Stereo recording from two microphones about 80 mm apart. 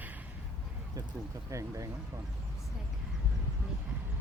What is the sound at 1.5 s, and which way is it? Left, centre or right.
Speech, right.